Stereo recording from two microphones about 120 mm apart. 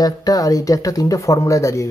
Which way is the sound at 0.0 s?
30° left (ahead or behind).